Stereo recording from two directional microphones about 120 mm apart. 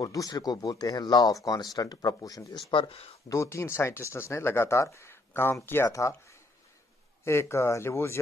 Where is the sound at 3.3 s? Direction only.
25° left (ahead or behind).